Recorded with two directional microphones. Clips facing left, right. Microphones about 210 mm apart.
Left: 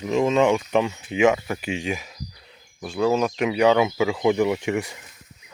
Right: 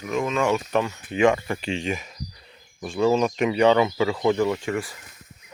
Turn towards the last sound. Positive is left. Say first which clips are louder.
# left 2 dB
turn(degrees=20)  # may be behind; listen again after turning